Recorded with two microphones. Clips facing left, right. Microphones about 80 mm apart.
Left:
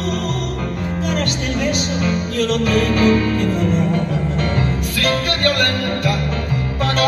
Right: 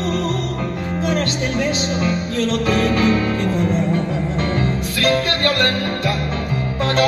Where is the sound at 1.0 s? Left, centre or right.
Right.